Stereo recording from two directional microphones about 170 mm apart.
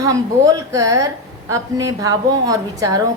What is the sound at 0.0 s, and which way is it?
A woman's voice, 20° right (ahead or behind).